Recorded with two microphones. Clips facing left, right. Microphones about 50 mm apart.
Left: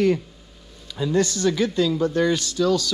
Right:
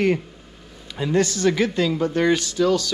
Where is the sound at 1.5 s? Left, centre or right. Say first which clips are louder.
Even; right.